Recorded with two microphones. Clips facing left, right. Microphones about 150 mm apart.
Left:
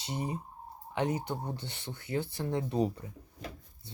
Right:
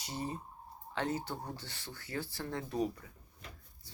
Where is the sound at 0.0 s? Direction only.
20° left (ahead or behind).